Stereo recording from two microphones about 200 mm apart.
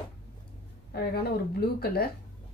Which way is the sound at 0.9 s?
50° left (ahead or behind).